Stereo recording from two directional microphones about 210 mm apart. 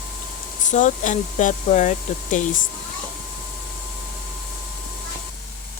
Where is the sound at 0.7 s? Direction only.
35° left (ahead or behind).